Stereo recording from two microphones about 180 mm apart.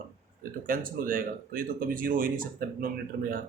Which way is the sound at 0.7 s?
50° right (ahead or behind).